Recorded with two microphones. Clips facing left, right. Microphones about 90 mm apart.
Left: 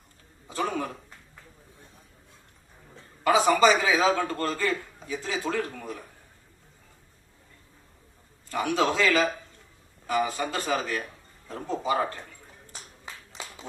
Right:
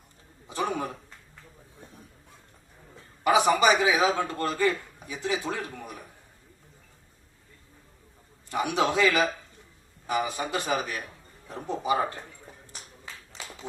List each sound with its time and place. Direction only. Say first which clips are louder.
0.4 s a sound: even; 20° right (ahead or behind)
3.2 s a man's voice: left 1 dB; 20° right (ahead or behind)
8.4 s a man's voice: left 1 dB; 20° right (ahead or behind)